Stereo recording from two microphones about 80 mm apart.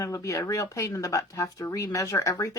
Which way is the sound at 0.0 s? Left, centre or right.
Left.